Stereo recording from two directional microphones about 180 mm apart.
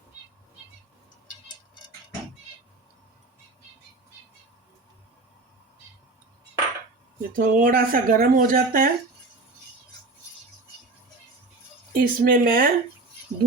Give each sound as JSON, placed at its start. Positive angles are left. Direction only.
{"t": 7.2, "sound": "speech", "side_deg": -50}
{"t": 11.9, "sound": "speech", "side_deg": -55}